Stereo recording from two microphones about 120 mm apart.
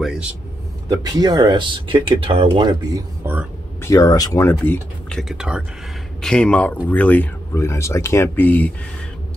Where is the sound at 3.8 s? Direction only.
30° left (ahead or behind).